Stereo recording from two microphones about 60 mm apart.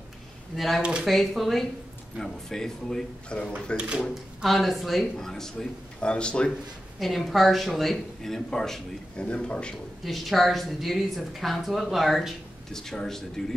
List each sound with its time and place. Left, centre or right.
0.6 s speech: centre
3.7 s speech: centre
4.1 s speech: centre
7.0 s speech: centre
10.0 s speech: centre